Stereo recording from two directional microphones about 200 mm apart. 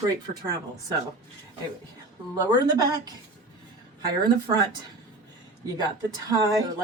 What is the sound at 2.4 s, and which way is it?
Speech, 20° right (ahead or behind).